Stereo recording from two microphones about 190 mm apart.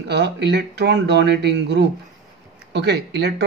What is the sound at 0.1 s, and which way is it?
Speech, 60° right (ahead or behind).